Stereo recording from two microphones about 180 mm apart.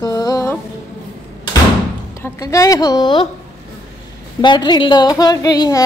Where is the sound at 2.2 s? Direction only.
20° left (ahead or behind).